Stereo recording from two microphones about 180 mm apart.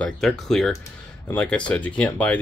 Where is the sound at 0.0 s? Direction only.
Centre (ahead or behind).